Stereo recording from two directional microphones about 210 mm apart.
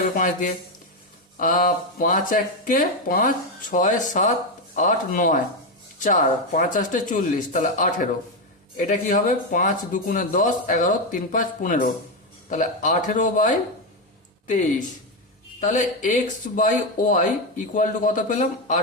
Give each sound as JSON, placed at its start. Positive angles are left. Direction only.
{"t": 0.2, "sound": "speech", "side_deg": 40}